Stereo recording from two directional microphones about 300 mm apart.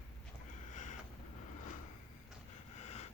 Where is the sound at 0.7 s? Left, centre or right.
Left.